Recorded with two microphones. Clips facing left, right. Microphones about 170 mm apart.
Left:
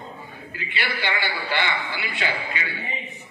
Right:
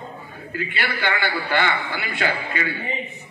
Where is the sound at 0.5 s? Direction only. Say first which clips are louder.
Right 4 dB; 50° right (ahead or behind).